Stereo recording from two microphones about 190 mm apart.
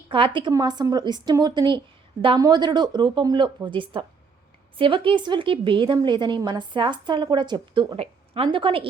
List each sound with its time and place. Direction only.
0.1 s a woman's voice: 25° right (ahead or behind)